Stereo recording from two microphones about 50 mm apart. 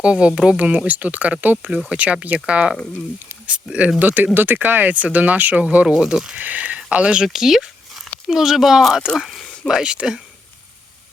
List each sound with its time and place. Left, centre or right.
0.0 s speech: centre
5.9 s speech: centre
6.3 s speech: right
7.3 s speech: centre
9.1 s a sound: centre
9.6 s speech: centre